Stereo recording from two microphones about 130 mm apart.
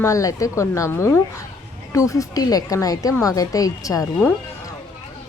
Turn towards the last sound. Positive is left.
turn(degrees=25)  # may be behind; listen again after turning